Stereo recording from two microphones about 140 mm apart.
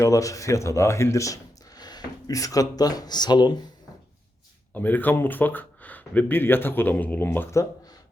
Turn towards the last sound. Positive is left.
turn(degrees=15)  # may be behind; listen again after turning